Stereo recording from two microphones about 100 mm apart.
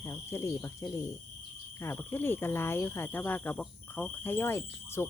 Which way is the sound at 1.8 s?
20° left (ahead or behind).